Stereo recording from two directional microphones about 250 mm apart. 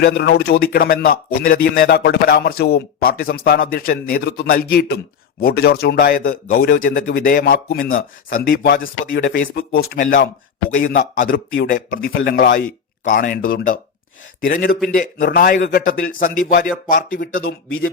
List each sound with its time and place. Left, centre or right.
0.0 s speech: left